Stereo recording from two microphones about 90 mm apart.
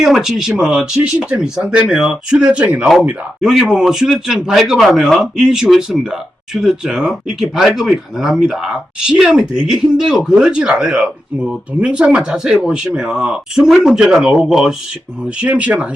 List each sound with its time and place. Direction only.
0.0 s speech: 5° right (ahead or behind)
15.4 s speech: 15° right (ahead or behind)